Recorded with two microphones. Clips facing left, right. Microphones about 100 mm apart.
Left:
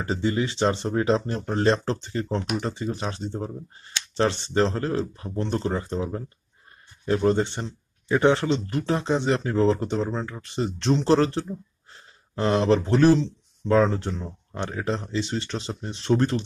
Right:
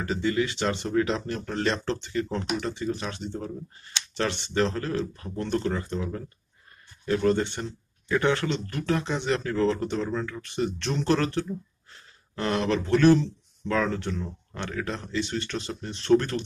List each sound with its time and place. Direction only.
0.0 s speech: 25° left (ahead or behind)